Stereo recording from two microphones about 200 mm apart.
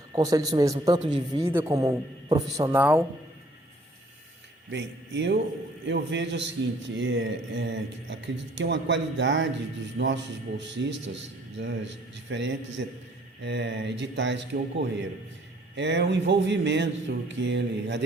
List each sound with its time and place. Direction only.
0.1 s speech: 20° right (ahead or behind)
1.5 s speech: 15° right (ahead or behind)
4.7 s a man's voice: 60° right (ahead or behind)